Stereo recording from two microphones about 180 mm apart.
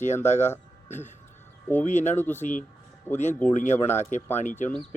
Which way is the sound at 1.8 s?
40° left (ahead or behind).